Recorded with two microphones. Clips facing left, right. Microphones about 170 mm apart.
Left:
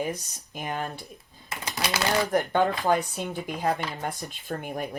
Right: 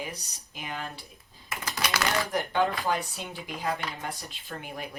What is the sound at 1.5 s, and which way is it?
Typewriter, 25° left (ahead or behind).